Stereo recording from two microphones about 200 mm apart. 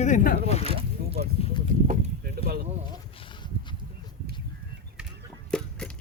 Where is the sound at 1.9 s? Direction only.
50° right (ahead or behind).